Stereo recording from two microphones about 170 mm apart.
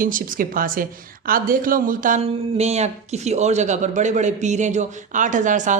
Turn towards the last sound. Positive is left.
turn(degrees=-45)  # may be behind; listen again after turning